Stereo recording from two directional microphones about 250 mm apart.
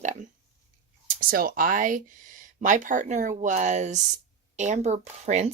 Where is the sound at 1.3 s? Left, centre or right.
Right.